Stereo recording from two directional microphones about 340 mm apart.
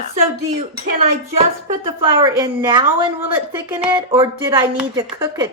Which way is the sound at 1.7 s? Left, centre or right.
Centre.